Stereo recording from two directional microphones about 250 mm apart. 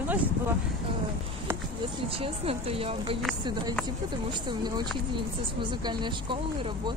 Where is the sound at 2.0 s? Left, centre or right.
Right.